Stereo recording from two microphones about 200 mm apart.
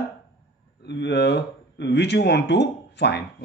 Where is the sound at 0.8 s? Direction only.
60° left (ahead or behind).